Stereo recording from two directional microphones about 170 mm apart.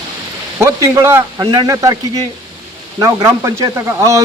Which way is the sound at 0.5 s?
15° right (ahead or behind).